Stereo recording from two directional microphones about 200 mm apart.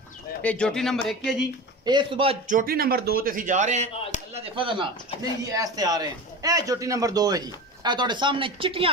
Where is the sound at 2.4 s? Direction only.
45° right (ahead or behind).